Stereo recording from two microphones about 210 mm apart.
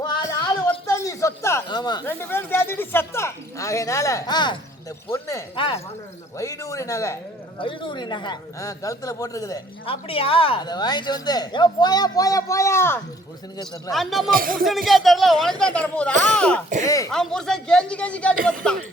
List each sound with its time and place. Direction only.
0.0 s a sound: 20° left (ahead or behind)
5.5 s a woman's voice: 25° left (ahead or behind)
6.3 s a woman's voice: 15° left (ahead or behind)
9.8 s a woman's voice: 25° left (ahead or behind)
13.9 s speech: centre (ahead or behind)
14.3 s speech: 45° right (ahead or behind)
14.8 s speech: centre (ahead or behind)
16.8 s speech: 15° left (ahead or behind)
17.1 s speech: centre (ahead or behind)